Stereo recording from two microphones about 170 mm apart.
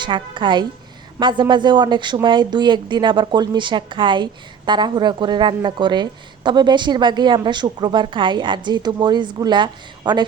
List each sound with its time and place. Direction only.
0.0 s a woman's voice: 25° right (ahead or behind)